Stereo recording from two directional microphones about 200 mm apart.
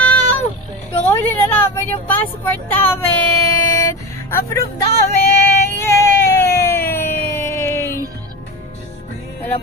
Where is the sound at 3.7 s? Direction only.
15° left (ahead or behind).